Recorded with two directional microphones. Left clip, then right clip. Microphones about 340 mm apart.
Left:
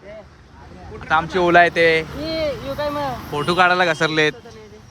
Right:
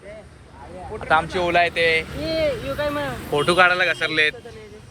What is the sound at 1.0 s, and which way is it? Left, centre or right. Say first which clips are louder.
Speech: even; centre.